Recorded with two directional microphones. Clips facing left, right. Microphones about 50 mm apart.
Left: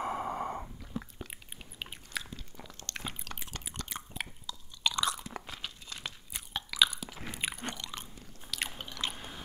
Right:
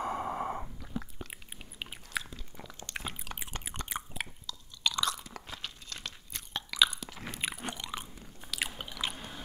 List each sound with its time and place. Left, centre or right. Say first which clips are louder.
0.0 s breathing: even; centre
1.1 s chewing: right 1 dB; centre
2.6 s a sound: right 2 dB; centre
3.6 s a sound: right 4 dB; right
4.5 s chewing: left 1 dB; centre
5.1 s crunch: left 3 dB; left
5.5 s crunch: even; centre
6.9 s biting: even; centre
7.6 s biting: right 1 dB; centre
8.5 s chewing: right 1 dB; centre